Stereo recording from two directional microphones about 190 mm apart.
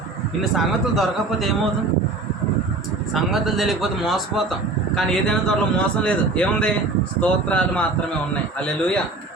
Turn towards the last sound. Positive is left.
turn(degrees=5)  # may be behind; listen again after turning